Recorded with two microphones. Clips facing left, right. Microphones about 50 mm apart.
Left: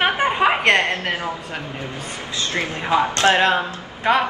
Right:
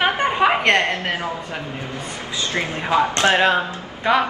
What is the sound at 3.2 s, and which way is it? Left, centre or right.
Speech, right.